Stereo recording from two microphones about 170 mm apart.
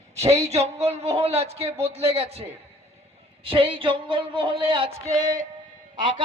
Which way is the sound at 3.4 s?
35° right (ahead or behind).